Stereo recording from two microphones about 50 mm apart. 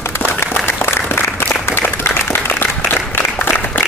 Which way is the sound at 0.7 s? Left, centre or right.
Left.